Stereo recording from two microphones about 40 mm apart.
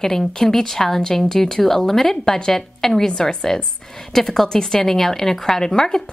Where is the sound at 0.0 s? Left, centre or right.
Centre.